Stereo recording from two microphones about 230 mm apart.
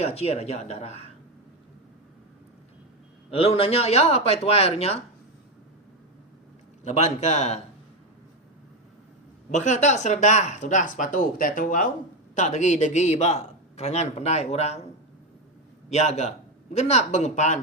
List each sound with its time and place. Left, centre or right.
0.0 s a man's voice: left
3.3 s a man's voice: left
6.8 s a man's voice: left
9.5 s a man's voice: left
15.9 s a man's voice: left